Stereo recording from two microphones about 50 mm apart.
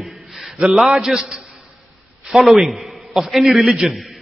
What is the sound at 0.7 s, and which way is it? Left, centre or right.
Speech, centre.